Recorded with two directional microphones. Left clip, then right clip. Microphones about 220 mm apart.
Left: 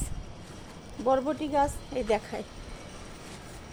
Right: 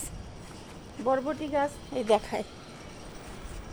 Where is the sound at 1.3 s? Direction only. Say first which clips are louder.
Left 2 dB; 15° left (ahead or behind).